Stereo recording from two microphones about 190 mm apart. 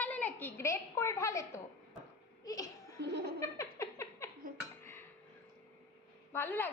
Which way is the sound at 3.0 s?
60° right (ahead or behind).